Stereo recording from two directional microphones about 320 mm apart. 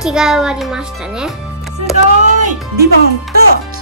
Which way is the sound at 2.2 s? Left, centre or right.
Right.